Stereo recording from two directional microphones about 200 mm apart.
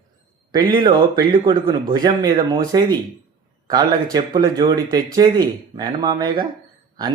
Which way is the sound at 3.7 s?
20° right (ahead or behind).